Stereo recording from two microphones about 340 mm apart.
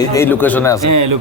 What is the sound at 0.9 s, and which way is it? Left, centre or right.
Speech, right.